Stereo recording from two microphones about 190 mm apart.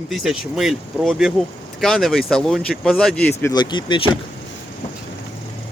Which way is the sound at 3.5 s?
25° left (ahead or behind).